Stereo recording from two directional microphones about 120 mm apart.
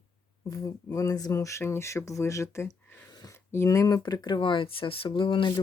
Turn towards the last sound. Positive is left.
turn(degrees=45)  # may be behind; listen again after turning